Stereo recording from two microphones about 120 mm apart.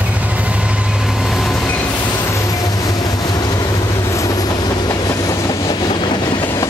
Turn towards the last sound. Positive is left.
turn(degrees=40)  # may be behind; listen again after turning